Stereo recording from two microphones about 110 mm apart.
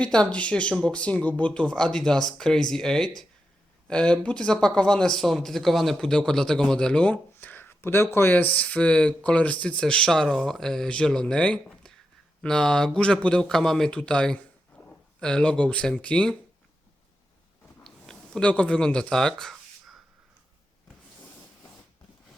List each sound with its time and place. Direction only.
0.0 s speech: 10° left (ahead or behind)
7.3 s a sound: 15° left (ahead or behind)
8.1 s speech: 20° left (ahead or behind)
17.8 s speech: 5° left (ahead or behind)